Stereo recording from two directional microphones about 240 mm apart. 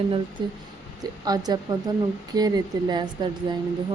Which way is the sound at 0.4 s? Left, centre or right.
Centre.